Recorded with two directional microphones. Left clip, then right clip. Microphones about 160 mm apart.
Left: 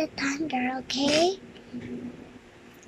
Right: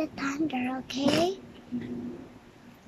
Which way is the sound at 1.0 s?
55° right (ahead or behind).